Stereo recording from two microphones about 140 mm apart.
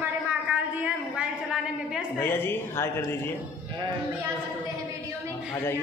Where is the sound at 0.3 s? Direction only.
10° right (ahead or behind).